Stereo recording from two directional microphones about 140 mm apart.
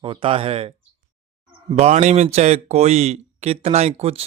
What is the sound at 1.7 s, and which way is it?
Speech, 55° right (ahead or behind).